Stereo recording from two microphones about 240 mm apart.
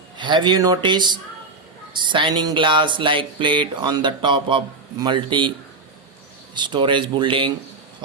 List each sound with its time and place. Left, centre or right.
0.2 s speech: centre